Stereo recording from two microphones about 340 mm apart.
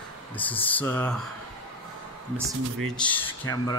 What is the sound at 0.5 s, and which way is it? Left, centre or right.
Speech, centre.